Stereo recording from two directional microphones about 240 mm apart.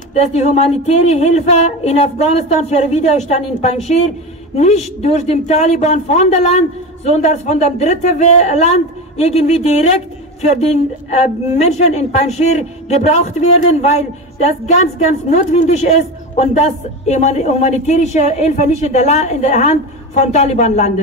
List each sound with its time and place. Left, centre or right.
0.1 s speech: left
15.2 s speech: left
17.1 s speech: left